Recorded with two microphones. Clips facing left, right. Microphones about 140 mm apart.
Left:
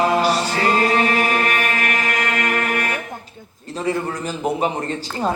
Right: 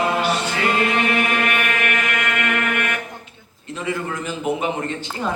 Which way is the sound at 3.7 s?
35° left (ahead or behind).